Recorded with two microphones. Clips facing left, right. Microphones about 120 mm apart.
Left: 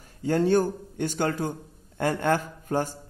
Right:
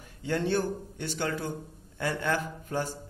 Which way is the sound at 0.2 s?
40° left (ahead or behind).